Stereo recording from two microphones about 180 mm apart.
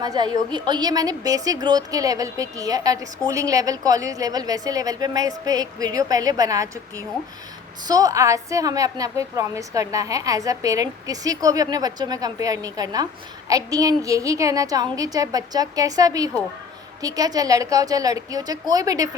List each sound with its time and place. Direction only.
0.0 s a woman's voice: 25° right (ahead or behind)